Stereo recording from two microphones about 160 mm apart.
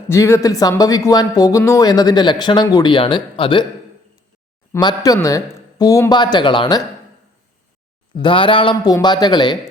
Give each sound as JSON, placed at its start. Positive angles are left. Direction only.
{"t": 0.1, "sound": "speech", "side_deg": 15}
{"t": 4.7, "sound": "speech", "side_deg": 25}
{"t": 8.2, "sound": "speech", "side_deg": 30}